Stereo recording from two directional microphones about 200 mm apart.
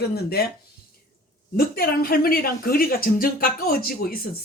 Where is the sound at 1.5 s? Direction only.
50° left (ahead or behind).